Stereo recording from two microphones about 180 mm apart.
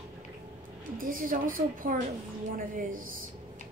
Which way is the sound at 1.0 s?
50° right (ahead or behind).